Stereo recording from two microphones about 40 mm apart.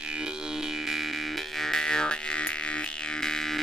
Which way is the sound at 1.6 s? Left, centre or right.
Centre.